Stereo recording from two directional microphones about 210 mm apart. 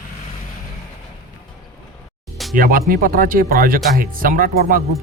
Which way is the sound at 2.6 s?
45° right (ahead or behind).